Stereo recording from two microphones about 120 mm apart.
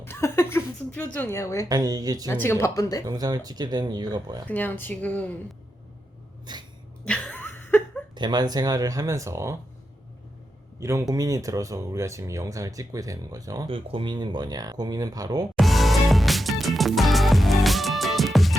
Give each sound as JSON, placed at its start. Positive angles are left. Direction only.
{"t": 0.0, "sound": "speech", "side_deg": 20}
{"t": 1.7, "sound": "speech", "side_deg": -30}
{"t": 2.2, "sound": "speech", "side_deg": 20}
{"t": 3.1, "sound": "speech", "side_deg": -30}
{"t": 4.4, "sound": "speech", "side_deg": 15}
{"t": 6.4, "sound": "a sound", "side_deg": -35}
{"t": 7.0, "sound": "a sound", "side_deg": 10}
{"t": 8.1, "sound": "speech", "side_deg": -40}
{"t": 10.8, "sound": "speech", "side_deg": -25}
{"t": 13.7, "sound": "speech", "side_deg": -45}
{"t": 15.5, "sound": "music", "side_deg": 0}